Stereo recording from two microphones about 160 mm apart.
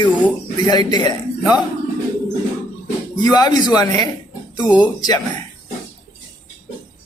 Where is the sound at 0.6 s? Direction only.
25° left (ahead or behind).